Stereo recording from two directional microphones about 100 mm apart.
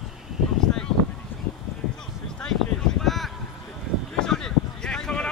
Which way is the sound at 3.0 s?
Centre (ahead or behind).